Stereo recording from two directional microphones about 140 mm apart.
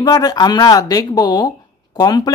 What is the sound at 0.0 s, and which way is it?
Speech, 25° left (ahead or behind).